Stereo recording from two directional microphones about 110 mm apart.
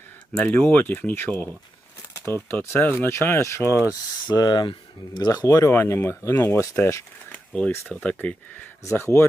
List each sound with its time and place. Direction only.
0.3 s speech: 15° left (ahead or behind)
4.3 s speech: 40° left (ahead or behind)
5.3 s speech: 30° left (ahead or behind); by 8.6 s 15° left (ahead or behind)
8.8 s speech: 25° left (ahead or behind)